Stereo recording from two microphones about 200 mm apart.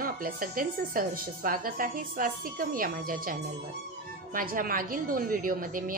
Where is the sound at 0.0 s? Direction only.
45° right (ahead or behind).